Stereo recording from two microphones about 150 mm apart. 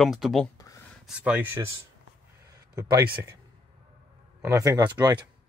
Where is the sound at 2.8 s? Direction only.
20° right (ahead or behind).